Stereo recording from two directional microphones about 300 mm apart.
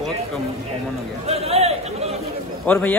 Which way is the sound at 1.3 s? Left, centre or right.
Right.